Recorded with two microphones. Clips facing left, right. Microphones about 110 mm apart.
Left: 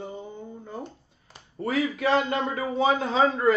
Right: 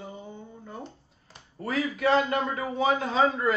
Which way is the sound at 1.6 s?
30° left (ahead or behind).